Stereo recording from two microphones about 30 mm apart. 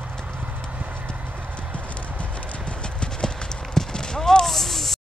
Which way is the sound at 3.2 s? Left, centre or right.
Left.